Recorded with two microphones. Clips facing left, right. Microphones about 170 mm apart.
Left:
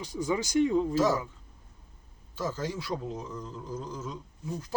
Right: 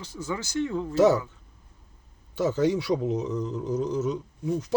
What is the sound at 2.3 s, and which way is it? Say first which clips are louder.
Speech: right 10 dB; 70° right (ahead or behind).